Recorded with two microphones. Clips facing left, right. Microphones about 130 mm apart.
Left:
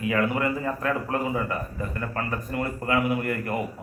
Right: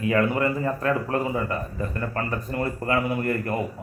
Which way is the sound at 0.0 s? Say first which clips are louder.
Right 2 dB; 30° right (ahead or behind).